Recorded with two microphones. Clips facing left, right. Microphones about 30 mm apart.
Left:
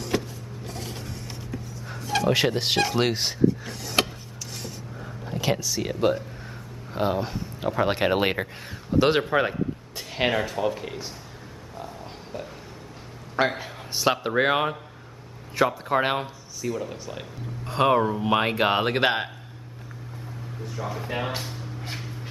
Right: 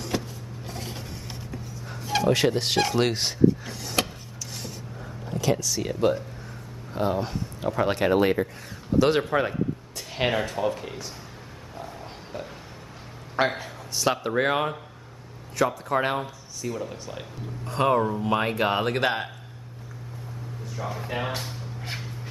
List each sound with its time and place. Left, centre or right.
0.0 s music: centre
2.2 s speech: centre
5.0 s a sound: centre
5.6 s speech: centre
7.2 s speech: centre
7.7 s speech: centre
8.9 s speech: left
10.1 s speech: centre
11.8 s a sound: centre
13.6 s speech: centre
16.6 s speech: centre
17.7 s speech: centre
20.7 s speech: centre